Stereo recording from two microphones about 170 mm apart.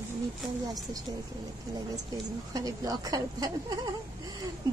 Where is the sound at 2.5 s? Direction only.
20° right (ahead or behind).